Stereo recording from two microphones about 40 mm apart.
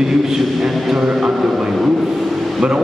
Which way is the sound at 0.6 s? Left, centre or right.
Centre.